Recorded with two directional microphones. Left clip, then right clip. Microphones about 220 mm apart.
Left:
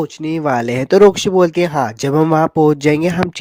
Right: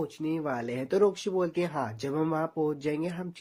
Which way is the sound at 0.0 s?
45° left (ahead or behind).